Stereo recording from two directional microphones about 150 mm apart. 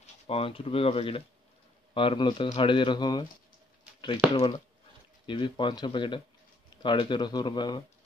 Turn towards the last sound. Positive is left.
turn(degrees=30)  # may be behind; listen again after turning